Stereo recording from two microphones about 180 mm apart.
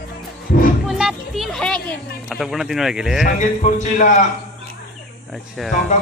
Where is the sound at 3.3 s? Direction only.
45° left (ahead or behind).